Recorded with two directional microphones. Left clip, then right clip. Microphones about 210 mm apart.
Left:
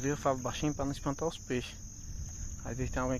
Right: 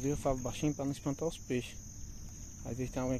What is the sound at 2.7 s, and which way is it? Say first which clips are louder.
Speech: left 2 dB; 20° right (ahead or behind).